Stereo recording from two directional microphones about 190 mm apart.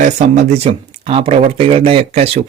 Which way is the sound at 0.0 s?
35° right (ahead or behind).